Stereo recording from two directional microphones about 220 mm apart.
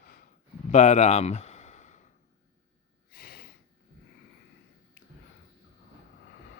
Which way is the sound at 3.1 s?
45° left (ahead or behind).